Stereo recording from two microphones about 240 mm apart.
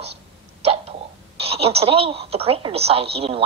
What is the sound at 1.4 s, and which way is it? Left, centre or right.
A woman's voice, right.